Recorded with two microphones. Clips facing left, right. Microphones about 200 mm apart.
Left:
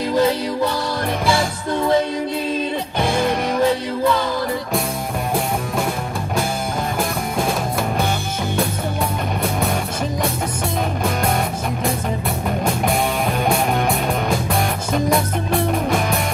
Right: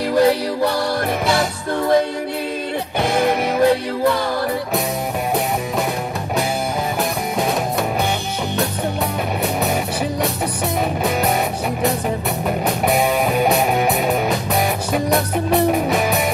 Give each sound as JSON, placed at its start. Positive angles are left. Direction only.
{"t": 0.1, "sound": "music", "side_deg": -60}
{"t": 3.6, "sound": "music", "side_deg": -60}
{"t": 12.6, "sound": "music", "side_deg": -5}
{"t": 15.7, "sound": "music", "side_deg": 0}